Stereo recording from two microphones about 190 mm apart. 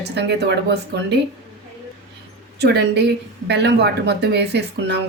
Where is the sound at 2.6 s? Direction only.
60° right (ahead or behind).